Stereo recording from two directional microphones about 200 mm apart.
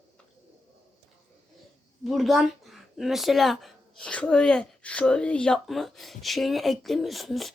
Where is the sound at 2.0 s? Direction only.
Centre (ahead or behind).